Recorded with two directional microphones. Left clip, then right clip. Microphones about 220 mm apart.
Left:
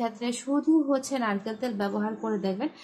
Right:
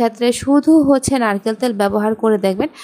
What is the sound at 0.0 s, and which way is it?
Speech, 45° right (ahead or behind).